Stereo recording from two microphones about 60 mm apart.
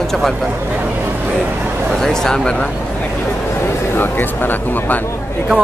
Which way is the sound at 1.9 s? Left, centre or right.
Centre.